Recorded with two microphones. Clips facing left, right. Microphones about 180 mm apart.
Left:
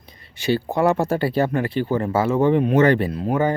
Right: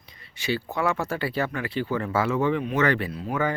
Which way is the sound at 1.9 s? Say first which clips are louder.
Left 6 dB; 30° left (ahead or behind).